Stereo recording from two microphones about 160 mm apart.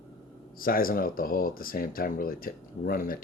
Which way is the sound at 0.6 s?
65° left (ahead or behind).